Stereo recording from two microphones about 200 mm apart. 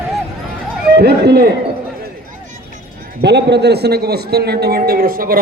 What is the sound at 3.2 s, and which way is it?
A man's voice, 60° right (ahead or behind).